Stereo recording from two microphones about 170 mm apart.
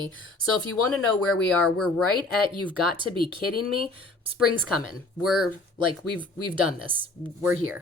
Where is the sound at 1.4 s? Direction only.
5° left (ahead or behind).